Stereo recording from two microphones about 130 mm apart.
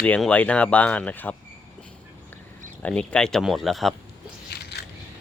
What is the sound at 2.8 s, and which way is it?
Speech, 10° left (ahead or behind).